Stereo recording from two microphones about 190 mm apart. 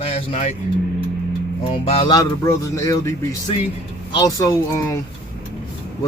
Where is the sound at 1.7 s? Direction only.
25° left (ahead or behind).